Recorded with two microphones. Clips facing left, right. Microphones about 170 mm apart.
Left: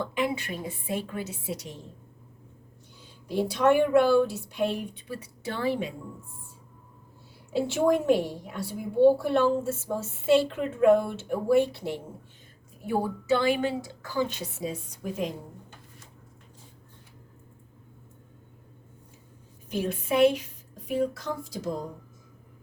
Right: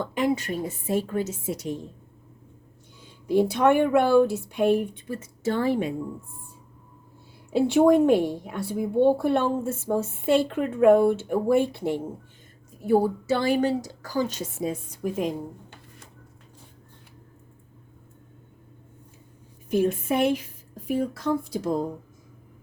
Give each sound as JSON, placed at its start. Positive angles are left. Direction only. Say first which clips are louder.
{"t": 0.1, "sound": "speech", "louder": "right 4 dB", "side_deg": -45}
{"t": 3.2, "sound": "speech", "louder": "right 3 dB", "side_deg": -55}
{"t": 7.5, "sound": "a woman's voice", "louder": "right 6 dB", "side_deg": -55}
{"t": 12.8, "sound": "speech", "louder": "right 7 dB", "side_deg": -40}
{"t": 19.7, "sound": "a woman's voice", "louder": "right 4 dB", "side_deg": -50}